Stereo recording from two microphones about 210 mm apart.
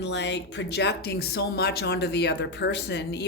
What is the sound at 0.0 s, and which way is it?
Speech, 60° left (ahead or behind).